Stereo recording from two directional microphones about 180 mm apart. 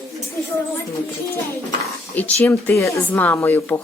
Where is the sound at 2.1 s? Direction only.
10° left (ahead or behind).